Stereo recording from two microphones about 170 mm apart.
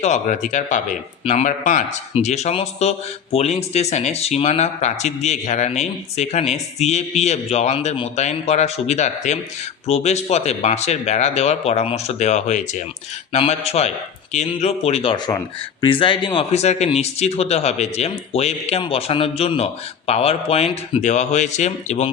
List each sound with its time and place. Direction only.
0.0 s speech: 45° left (ahead or behind)
15.1 s speech: 20° left (ahead or behind); by 22.1 s 40° left (ahead or behind)